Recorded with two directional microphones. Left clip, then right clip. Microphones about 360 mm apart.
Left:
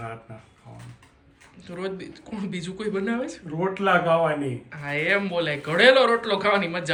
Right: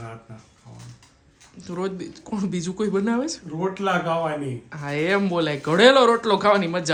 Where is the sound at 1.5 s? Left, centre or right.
Centre.